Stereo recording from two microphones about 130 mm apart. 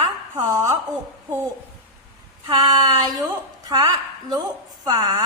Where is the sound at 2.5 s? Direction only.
30° right (ahead or behind).